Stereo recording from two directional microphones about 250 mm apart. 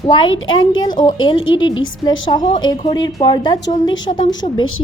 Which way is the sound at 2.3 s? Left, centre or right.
Centre.